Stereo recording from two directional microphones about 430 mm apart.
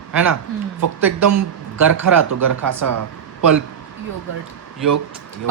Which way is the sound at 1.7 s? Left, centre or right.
Right.